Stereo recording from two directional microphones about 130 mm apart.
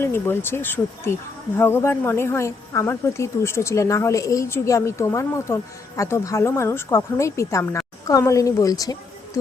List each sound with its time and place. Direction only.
0.0 s a woman's voice: 15° left (ahead or behind)